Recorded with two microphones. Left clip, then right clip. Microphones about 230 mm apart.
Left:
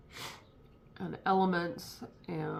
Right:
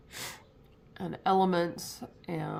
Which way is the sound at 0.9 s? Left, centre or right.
Right.